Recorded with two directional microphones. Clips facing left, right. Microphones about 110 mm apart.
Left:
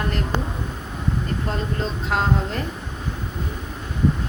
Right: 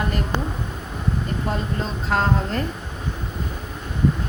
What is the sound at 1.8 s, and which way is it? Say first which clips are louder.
Speech: right 1 dB; centre (ahead or behind).